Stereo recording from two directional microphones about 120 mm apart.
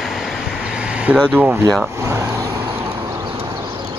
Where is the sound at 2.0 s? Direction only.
25° right (ahead or behind).